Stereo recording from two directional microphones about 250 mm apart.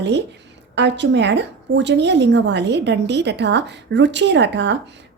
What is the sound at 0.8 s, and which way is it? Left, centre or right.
Speech, right.